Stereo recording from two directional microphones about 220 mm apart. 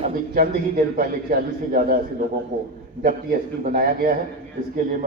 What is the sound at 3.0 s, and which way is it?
A man's voice, 40° right (ahead or behind).